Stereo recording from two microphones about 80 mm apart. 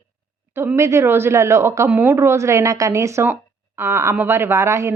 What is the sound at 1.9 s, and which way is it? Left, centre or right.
Speech, right.